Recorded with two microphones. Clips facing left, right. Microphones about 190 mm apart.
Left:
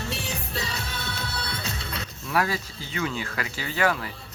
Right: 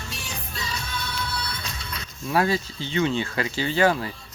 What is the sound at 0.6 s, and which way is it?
Music, 65° left (ahead or behind).